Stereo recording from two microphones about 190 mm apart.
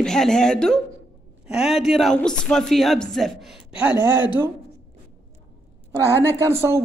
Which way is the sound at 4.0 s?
20° left (ahead or behind).